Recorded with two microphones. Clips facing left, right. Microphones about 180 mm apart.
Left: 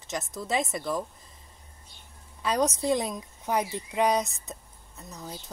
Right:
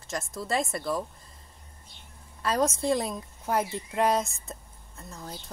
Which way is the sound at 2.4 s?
Centre (ahead or behind).